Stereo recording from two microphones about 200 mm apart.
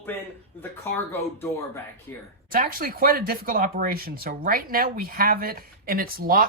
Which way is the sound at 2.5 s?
45° right (ahead or behind).